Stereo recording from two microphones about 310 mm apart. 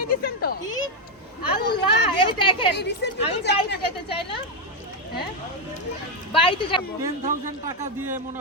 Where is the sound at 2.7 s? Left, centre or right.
Left.